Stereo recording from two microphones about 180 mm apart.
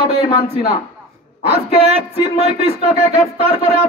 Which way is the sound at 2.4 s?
35° right (ahead or behind).